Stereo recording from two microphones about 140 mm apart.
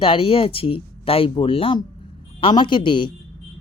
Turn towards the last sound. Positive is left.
turn(degrees=35)  # may be behind; listen again after turning